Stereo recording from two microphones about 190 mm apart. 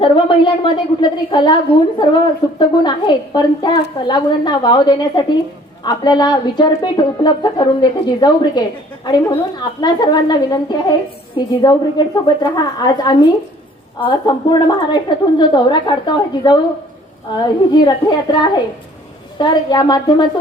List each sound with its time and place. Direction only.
0.0 s a woman's voice: 25° left (ahead or behind)